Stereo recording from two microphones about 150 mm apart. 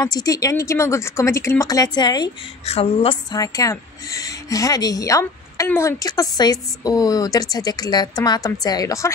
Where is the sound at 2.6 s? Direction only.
40° left (ahead or behind).